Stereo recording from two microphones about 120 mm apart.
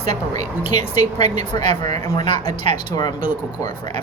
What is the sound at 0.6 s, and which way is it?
Speech, 70° right (ahead or behind).